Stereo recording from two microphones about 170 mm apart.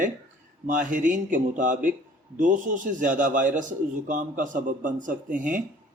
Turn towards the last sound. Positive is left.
turn(degrees=-50)  # may be behind; listen again after turning